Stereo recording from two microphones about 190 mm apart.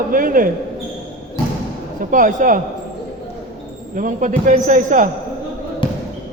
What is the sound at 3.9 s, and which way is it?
Speech, 45° right (ahead or behind).